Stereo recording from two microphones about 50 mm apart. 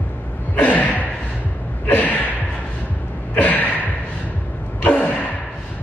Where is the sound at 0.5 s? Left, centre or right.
Left.